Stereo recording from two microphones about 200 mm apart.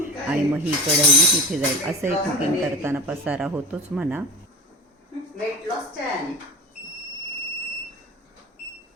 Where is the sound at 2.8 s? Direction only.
10° right (ahead or behind).